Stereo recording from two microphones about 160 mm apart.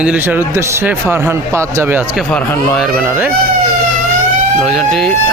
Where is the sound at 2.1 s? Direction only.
Centre (ahead or behind).